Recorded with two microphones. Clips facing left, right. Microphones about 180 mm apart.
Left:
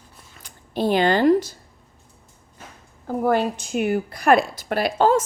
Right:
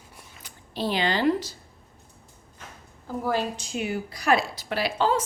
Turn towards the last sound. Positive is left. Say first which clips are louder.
# left 6 dB
turn(degrees=50)  # may be behind; listen again after turning